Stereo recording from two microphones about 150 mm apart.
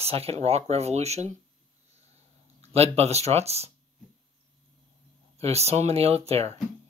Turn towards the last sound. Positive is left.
turn(degrees=-40)  # may be behind; listen again after turning